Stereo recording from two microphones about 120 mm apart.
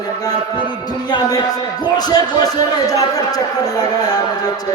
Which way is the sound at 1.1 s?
30° left (ahead or behind).